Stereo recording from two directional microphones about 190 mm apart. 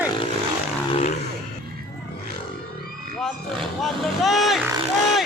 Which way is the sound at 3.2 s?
Centre (ahead or behind).